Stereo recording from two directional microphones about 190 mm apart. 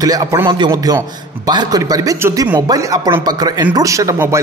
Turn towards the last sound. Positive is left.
turn(degrees=-15)  # may be behind; listen again after turning